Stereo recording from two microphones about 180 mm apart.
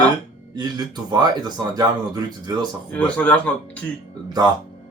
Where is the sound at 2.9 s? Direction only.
10° left (ahead or behind).